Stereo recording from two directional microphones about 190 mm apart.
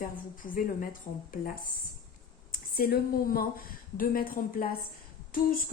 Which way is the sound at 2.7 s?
50° left (ahead or behind).